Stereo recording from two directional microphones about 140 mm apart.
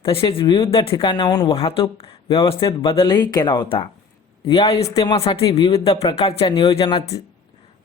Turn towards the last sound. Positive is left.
turn(degrees=40)  # may be behind; listen again after turning